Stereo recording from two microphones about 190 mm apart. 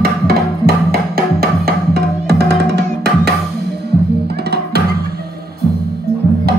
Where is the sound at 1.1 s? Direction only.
55° right (ahead or behind).